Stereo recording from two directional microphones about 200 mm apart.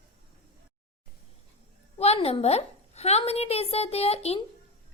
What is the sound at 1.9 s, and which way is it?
A woman's voice, 30° left (ahead or behind).